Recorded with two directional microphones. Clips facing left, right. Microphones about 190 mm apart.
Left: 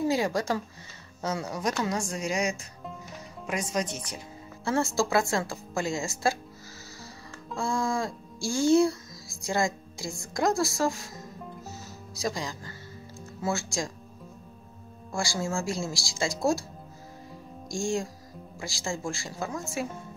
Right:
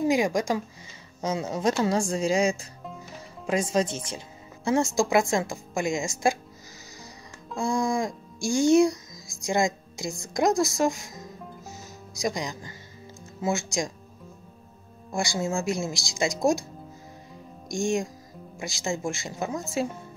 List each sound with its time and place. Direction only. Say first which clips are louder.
0.0 s speech: right 3 dB; 15° right (ahead or behind)
4.6 s speech: right 3 dB; 15° right (ahead or behind)
7.5 s speech: right 3 dB; 15° right (ahead or behind)
12.2 s speech: right 3 dB; 15° right (ahead or behind)
15.1 s speech: right 3 dB; 20° right (ahead or behind)
17.6 s speech: right 3 dB; 20° right (ahead or behind)